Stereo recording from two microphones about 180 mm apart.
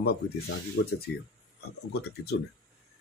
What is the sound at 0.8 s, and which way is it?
Speech, 65° left (ahead or behind).